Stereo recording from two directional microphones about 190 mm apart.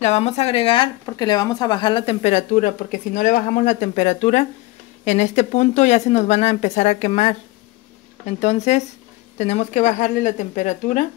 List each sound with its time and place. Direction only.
0.0 s speech: 35° left (ahead or behind)
8.4 s speech: 35° left (ahead or behind)